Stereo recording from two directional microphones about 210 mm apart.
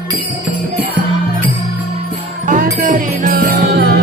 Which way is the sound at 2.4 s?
40° right (ahead or behind).